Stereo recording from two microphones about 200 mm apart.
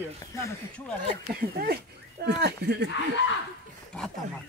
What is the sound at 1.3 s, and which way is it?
Speech, 50° right (ahead or behind).